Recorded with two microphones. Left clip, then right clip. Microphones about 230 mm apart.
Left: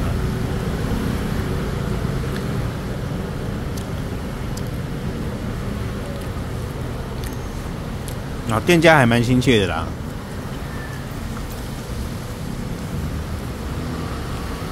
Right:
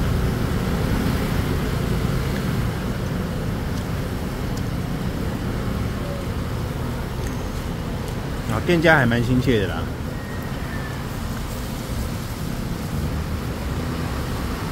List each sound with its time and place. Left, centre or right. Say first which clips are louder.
8.5 s a man's voice: left 3 dB; left